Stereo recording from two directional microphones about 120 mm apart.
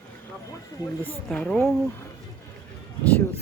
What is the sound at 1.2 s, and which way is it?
Speech, 5° left (ahead or behind).